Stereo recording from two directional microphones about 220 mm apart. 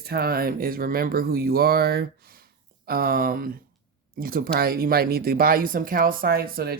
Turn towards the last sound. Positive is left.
turn(degrees=-45)  # may be behind; listen again after turning